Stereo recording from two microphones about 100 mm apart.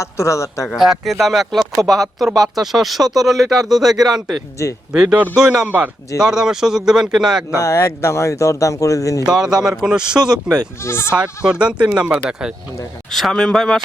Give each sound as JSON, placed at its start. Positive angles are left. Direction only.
{"t": 0.0, "sound": "speech", "side_deg": 30}
{"t": 0.7, "sound": "speech", "side_deg": 0}
{"t": 5.6, "sound": "speech", "side_deg": -20}
{"t": 6.1, "sound": "speech", "side_deg": -5}
{"t": 7.5, "sound": "speech", "side_deg": 30}
{"t": 9.3, "sound": "speech", "side_deg": -5}
{"t": 10.8, "sound": "speech", "side_deg": 25}
{"t": 11.1, "sound": "speech", "side_deg": -10}
{"t": 13.1, "sound": "speech", "side_deg": 0}